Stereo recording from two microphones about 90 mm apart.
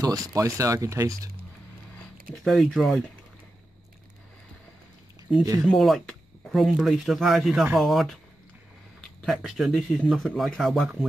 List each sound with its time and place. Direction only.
0.0 s speech: 45° right (ahead or behind)
2.4 s speech: centre (ahead or behind)
5.7 s speech: centre (ahead or behind)
9.2 s speech: 5° right (ahead or behind)